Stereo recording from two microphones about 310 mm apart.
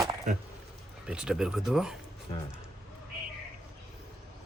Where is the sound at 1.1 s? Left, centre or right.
Centre.